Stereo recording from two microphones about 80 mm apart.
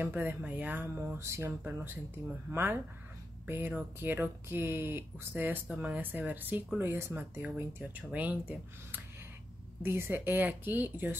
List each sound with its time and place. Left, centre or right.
0.0 s speech: right
9.8 s speech: right